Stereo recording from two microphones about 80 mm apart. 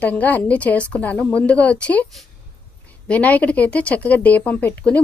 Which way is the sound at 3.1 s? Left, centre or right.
Centre.